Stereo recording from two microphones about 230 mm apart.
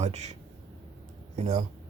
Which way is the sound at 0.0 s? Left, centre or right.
Right.